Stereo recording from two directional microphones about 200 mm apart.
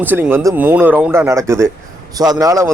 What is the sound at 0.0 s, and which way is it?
Speech, 10° right (ahead or behind).